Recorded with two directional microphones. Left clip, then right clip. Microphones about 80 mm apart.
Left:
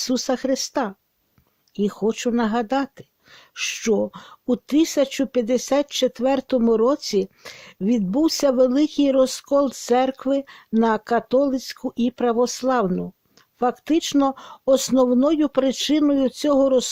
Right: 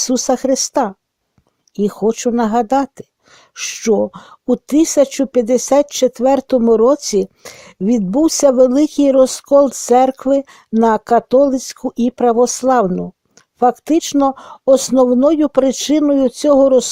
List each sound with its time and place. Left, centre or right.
0.0 s speech: right
1.7 s speech: right
3.5 s speech: right
12.9 s speech: right
13.6 s speech: right